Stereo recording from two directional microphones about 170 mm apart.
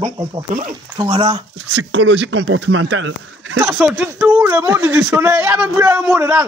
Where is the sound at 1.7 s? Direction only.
90° right.